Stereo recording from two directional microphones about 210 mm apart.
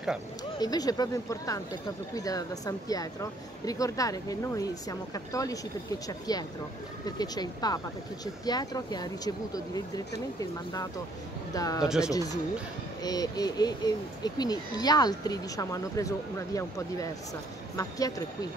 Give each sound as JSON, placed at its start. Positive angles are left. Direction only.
{"t": 0.6, "sound": "speech", "side_deg": 20}